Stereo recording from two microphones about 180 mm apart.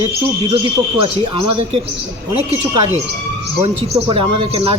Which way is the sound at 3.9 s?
30° right (ahead or behind).